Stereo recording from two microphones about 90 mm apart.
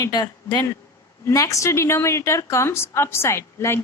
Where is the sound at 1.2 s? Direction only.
40° left (ahead or behind).